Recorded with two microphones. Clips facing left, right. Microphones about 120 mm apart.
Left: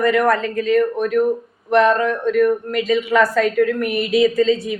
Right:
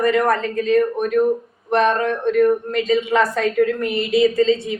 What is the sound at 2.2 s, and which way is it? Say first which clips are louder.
A woman's voice: right 1 dB; 25° right (ahead or behind).